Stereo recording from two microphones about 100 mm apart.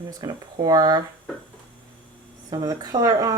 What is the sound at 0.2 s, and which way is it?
Speech, 40° right (ahead or behind).